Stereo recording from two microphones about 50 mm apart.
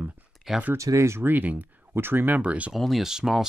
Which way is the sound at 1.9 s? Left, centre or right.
Right.